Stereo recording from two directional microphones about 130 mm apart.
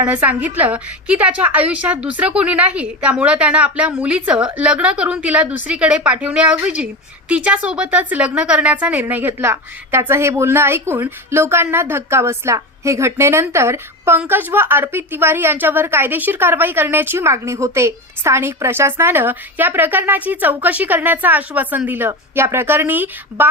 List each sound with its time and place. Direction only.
0.0 s a woman's voice: 10° right (ahead or behind)